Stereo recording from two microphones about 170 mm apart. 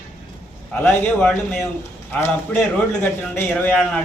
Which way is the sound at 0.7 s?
10° left (ahead or behind).